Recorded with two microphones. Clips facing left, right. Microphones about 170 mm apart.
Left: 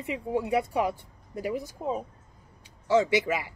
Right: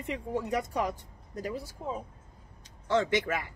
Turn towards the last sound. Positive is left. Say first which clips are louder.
# left 3 dB
turn(degrees=10)  # may be behind; listen again after turning